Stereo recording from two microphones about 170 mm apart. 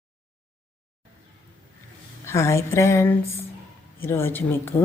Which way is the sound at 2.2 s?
15° left (ahead or behind).